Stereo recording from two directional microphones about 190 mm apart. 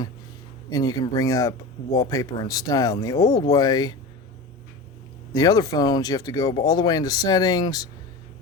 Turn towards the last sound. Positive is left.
turn(degrees=20)  # may be behind; listen again after turning